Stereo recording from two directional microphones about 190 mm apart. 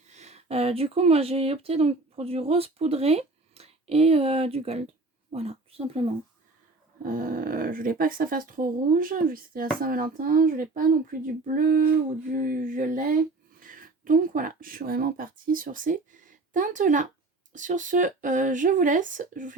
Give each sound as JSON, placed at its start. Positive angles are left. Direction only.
{"t": 0.1, "sound": "speech", "side_deg": -35}
{"t": 7.0, "sound": "speech", "side_deg": -45}